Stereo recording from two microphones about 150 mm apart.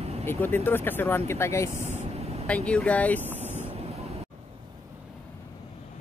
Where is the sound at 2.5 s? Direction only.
10° left (ahead or behind).